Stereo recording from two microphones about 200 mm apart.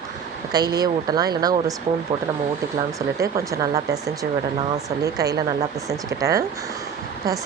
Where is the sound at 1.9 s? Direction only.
40° right (ahead or behind).